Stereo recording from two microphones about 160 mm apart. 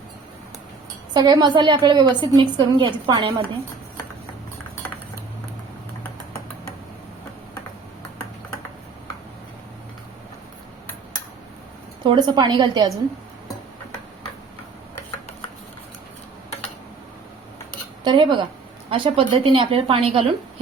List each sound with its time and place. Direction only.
1.1 s a woman's voice: 25° right (ahead or behind)
12.0 s a woman's voice: 30° right (ahead or behind)
18.0 s a woman's voice: 25° right (ahead or behind)